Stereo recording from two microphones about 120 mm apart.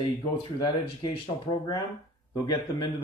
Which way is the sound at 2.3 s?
35° left (ahead or behind).